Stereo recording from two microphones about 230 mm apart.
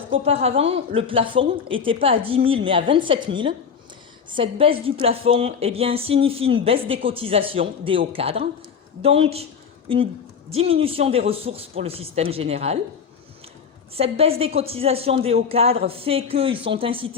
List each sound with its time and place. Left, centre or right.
0.1 s a woman's voice: right
10.6 s a woman's voice: right
13.9 s a woman's voice: right